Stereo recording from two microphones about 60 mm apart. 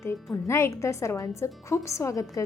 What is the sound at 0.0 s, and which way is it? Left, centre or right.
A woman's voice, left.